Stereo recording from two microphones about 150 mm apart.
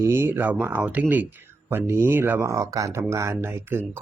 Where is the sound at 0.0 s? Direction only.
15° right (ahead or behind).